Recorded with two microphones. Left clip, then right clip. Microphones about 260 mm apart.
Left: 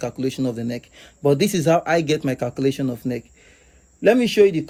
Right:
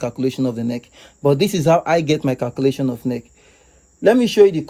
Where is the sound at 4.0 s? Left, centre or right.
Right.